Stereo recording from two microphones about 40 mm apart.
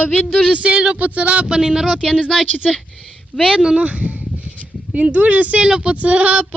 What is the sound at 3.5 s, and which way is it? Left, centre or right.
Speech, centre.